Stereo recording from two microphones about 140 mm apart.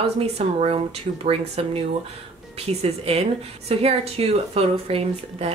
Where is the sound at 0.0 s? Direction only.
50° right (ahead or behind).